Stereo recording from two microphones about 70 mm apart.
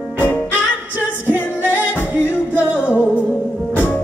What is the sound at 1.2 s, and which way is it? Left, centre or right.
Singing, left.